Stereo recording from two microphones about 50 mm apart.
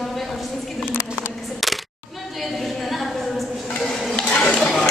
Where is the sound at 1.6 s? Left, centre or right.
Centre.